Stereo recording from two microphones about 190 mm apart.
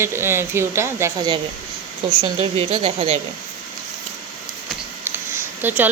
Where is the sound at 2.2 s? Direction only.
30° right (ahead or behind).